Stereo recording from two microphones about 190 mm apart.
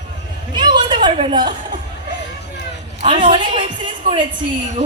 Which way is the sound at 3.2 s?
25° right (ahead or behind).